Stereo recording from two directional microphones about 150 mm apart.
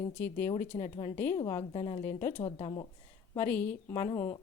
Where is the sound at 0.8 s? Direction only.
45° left (ahead or behind).